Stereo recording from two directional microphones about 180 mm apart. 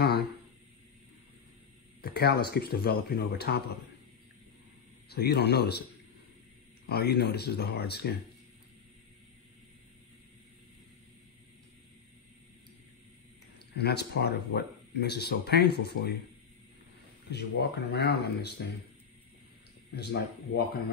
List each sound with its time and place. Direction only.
2.0 s speech: 60° left (ahead or behind)
5.1 s speech: 65° left (ahead or behind)
6.9 s speech: 65° left (ahead or behind)
13.7 s speech: 65° left (ahead or behind)
17.3 s speech: 70° left (ahead or behind)
20.0 s speech: 60° left (ahead or behind)